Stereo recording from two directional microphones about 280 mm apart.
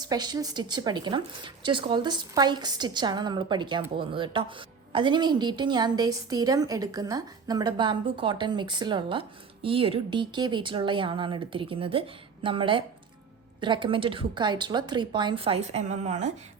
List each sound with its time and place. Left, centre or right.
0.0 s a woman's voice: centre